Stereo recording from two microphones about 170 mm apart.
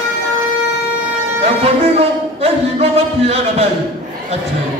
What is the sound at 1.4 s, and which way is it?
Music, 35° right (ahead or behind).